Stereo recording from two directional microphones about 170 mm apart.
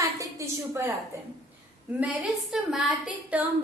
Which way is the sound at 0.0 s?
20° right (ahead or behind).